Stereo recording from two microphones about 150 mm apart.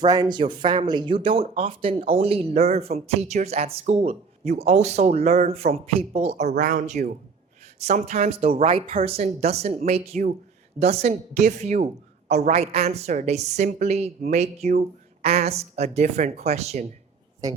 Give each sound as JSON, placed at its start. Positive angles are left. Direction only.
{"t": 0.0, "sound": "speech", "side_deg": -30}
{"t": 6.6, "sound": "speech", "side_deg": -55}